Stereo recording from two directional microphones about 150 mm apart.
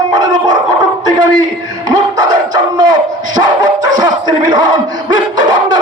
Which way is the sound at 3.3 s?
25° right (ahead or behind).